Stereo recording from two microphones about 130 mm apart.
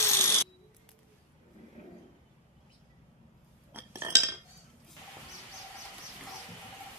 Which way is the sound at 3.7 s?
20° right (ahead or behind).